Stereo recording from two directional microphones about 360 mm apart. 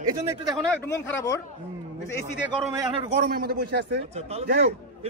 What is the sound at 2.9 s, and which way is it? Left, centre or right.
A man's voice, right.